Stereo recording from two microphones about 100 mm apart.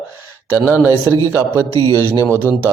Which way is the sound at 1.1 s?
30° left (ahead or behind).